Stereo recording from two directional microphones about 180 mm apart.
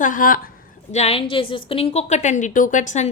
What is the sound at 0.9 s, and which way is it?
A woman's voice, 35° left (ahead or behind).